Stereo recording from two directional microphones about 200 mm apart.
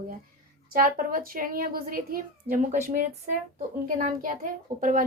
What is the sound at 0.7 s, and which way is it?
A woman's voice, 45° right (ahead or behind).